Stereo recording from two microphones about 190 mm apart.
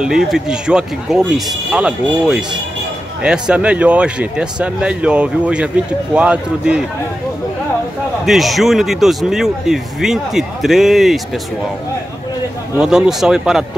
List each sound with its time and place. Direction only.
0.0 s speech: centre (ahead or behind)
8.3 s speech: centre (ahead or behind)
12.7 s speech: 5° right (ahead or behind)